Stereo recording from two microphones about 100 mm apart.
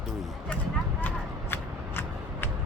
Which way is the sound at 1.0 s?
20° left (ahead or behind).